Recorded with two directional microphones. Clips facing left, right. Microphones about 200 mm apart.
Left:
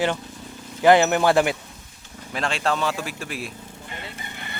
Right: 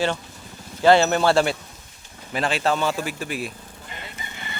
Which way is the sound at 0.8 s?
15° left (ahead or behind).